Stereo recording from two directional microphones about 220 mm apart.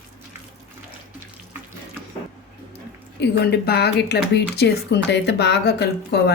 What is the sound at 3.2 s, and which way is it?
Speech, 45° left (ahead or behind).